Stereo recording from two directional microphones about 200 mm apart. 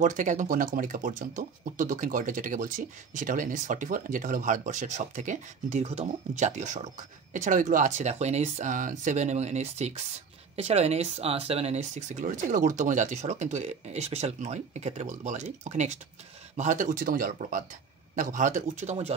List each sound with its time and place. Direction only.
0.0 s speech: 40° right (ahead or behind)